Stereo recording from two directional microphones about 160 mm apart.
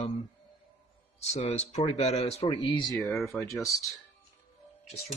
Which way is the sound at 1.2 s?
45° left (ahead or behind).